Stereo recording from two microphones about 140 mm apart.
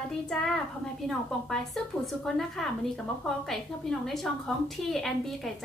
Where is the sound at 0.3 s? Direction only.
5° left (ahead or behind).